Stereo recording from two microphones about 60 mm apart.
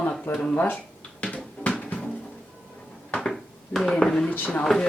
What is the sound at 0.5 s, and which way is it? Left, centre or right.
Speech, left.